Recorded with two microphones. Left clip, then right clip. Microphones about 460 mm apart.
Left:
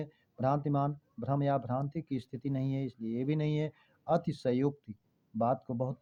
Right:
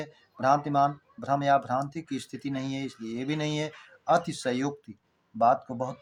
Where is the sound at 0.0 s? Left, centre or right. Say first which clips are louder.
Right 6 dB; left.